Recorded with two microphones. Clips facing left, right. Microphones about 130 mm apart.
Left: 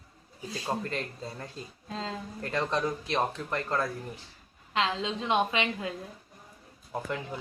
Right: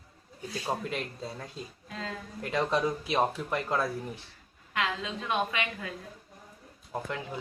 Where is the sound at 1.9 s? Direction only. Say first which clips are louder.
Left 3 dB; 25° left (ahead or behind).